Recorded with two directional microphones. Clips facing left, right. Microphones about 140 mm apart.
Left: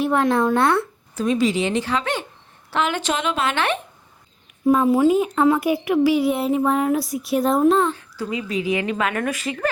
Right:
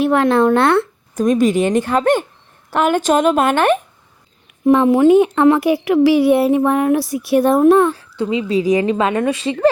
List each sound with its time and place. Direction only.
0.0 s speech: 70° right (ahead or behind)
1.1 s speech: 50° right (ahead or behind)
4.6 s speech: 75° right (ahead or behind)
7.9 s a woman's voice: 25° right (ahead or behind)